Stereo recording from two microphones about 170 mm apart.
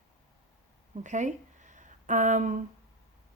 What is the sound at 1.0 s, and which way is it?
Speech, 45° right (ahead or behind).